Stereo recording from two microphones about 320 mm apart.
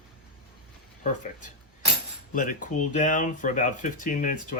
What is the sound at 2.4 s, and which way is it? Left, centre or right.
Speech, left.